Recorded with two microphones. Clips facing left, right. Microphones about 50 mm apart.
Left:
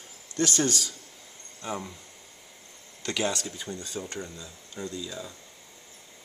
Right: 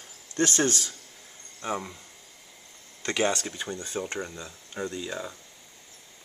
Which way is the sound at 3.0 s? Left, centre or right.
Right.